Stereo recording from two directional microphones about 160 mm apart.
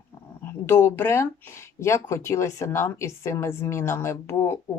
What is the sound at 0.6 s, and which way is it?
Speech, 15° left (ahead or behind).